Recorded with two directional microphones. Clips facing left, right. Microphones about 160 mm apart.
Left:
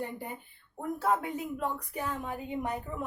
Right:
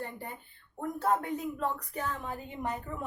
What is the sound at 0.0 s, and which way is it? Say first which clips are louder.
A woman's voice: left 3 dB; 15° left (ahead or behind).